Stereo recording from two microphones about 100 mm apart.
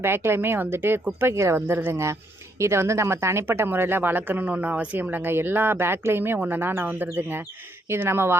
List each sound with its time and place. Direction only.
0.0 s speech: 25° right (ahead or behind)